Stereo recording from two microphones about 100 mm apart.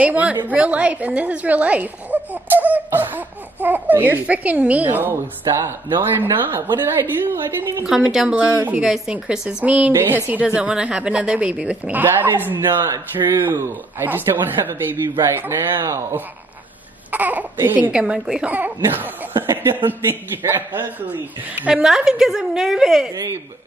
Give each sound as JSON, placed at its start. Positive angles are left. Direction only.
{"t": 0.0, "sound": "a woman's voice", "side_deg": -15}
{"t": 7.8, "sound": "a woman's voice", "side_deg": -5}
{"t": 17.1, "sound": "a woman's voice", "side_deg": -15}
{"t": 17.9, "sound": "a woman's voice", "side_deg": -10}
{"t": 18.5, "sound": "a woman's voice", "side_deg": -20}
{"t": 21.6, "sound": "a woman's voice", "side_deg": -5}
{"t": 23.1, "sound": "speech", "side_deg": -30}